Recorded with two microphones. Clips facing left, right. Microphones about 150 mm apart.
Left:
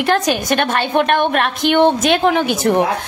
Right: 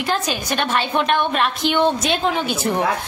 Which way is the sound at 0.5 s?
55° left (ahead or behind).